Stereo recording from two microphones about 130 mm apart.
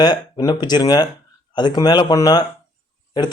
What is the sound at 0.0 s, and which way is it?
Speech, 30° left (ahead or behind).